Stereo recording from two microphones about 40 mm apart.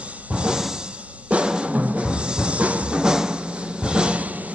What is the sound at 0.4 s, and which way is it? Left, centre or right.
Music, centre.